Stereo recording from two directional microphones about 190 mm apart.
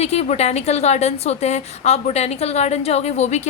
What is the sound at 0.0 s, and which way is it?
A woman's voice, 35° left (ahead or behind).